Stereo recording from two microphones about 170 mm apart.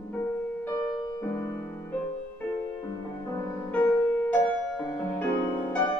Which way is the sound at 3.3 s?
15° left (ahead or behind).